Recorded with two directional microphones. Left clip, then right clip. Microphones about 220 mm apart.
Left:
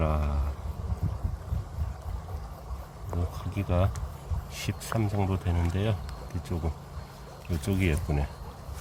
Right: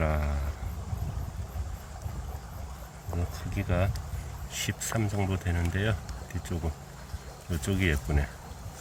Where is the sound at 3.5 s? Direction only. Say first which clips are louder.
Left 1 dB; 5° left (ahead or behind).